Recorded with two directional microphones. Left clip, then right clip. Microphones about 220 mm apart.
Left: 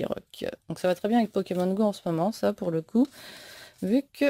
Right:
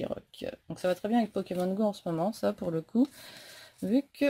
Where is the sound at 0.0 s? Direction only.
40° left (ahead or behind).